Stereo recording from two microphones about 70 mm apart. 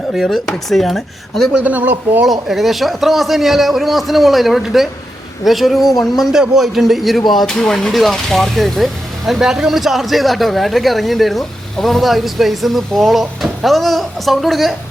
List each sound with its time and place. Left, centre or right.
0.1 s a man's voice: centre
1.6 s speech: right
2.2 s a man's voice: centre